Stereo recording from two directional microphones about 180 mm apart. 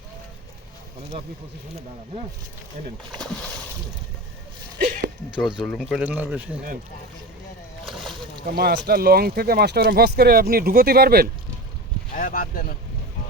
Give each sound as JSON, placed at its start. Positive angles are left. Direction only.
{"t": 4.8, "sound": "a sound", "side_deg": -65}
{"t": 5.3, "sound": "speech", "side_deg": -5}
{"t": 8.4, "sound": "speech", "side_deg": -60}
{"t": 12.1, "sound": "speech", "side_deg": 50}